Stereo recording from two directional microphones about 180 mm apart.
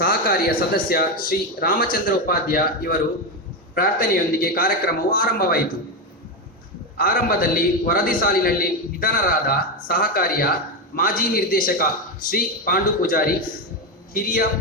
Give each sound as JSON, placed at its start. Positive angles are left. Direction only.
{"t": 0.0, "sound": "a man's voice", "side_deg": 55}
{"t": 6.9, "sound": "a man's voice", "side_deg": 55}